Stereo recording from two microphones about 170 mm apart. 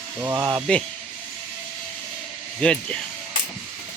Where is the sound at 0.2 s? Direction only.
10° right (ahead or behind).